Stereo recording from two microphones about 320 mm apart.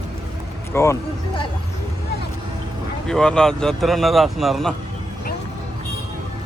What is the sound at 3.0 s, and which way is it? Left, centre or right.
A man's voice, centre.